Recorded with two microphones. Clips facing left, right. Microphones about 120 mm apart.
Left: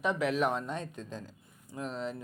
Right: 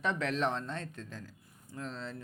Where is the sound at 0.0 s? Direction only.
10° left (ahead or behind).